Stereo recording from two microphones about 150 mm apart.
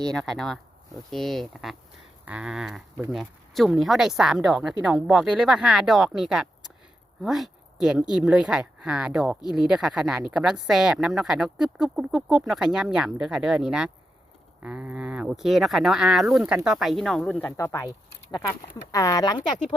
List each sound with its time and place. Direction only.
0.1 s speech: 5° left (ahead or behind); by 19.4 s 25° left (ahead or behind)